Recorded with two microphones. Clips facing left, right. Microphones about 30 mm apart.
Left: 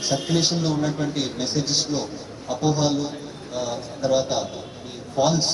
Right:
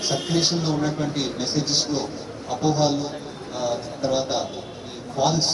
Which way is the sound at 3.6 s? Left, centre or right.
Centre.